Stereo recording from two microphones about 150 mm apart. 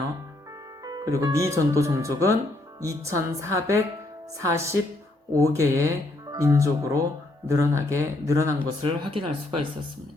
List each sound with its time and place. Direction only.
0.9 s speech: 25° right (ahead or behind)
8.8 s speech: 35° right (ahead or behind)